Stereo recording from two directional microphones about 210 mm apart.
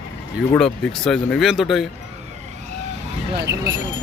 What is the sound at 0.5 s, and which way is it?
Speech, centre (ahead or behind).